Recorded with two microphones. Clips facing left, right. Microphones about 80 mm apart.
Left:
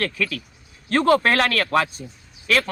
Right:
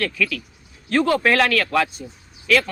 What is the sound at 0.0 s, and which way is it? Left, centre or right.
Speech, left.